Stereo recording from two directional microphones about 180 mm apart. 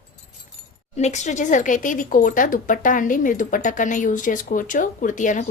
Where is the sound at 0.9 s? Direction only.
40° left (ahead or behind).